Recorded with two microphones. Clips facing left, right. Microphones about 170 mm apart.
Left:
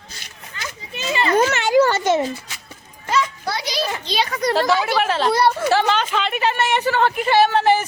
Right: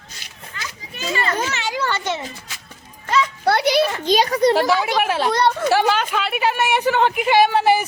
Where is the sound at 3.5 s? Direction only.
60° right (ahead or behind).